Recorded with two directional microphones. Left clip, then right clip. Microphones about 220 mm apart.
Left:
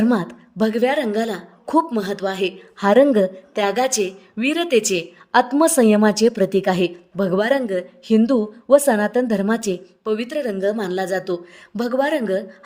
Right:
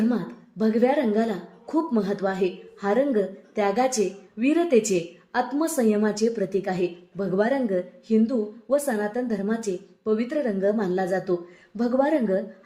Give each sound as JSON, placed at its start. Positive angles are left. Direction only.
{"t": 0.1, "sound": "a woman's voice", "side_deg": 35}